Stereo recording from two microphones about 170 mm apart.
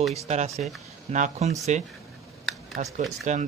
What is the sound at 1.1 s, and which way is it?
Speech, 45° right (ahead or behind).